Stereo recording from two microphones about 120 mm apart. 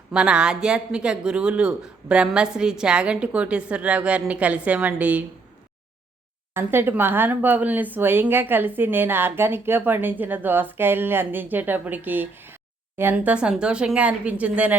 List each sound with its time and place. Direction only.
0.1 s speech: 10° right (ahead or behind)
6.5 s speech: 20° right (ahead or behind)